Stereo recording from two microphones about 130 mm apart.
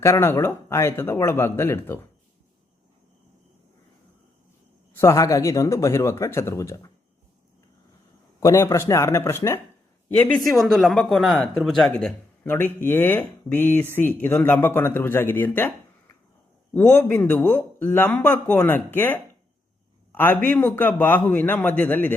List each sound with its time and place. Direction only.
0.0 s speech: 20° left (ahead or behind)
4.9 s speech: 25° left (ahead or behind)
8.4 s speech: 25° left (ahead or behind)
10.2 s speech: 10° left (ahead or behind)
10.6 s speech: centre (ahead or behind)
12.4 s speech: 15° left (ahead or behind)
16.7 s speech: 15° left (ahead or behind)